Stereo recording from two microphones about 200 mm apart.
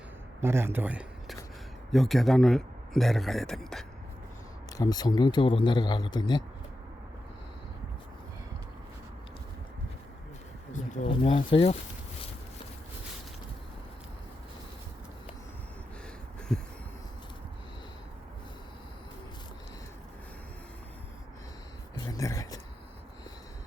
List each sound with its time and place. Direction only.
0.4 s a man's voice: 10° right (ahead or behind)
4.8 s a man's voice: 20° left (ahead or behind)
10.7 s a sound: 35° left (ahead or behind)
11.1 s a man's voice: 25° left (ahead or behind)
16.5 s heart sounds: 5° left (ahead or behind)
22.0 s a sound: 15° left (ahead or behind)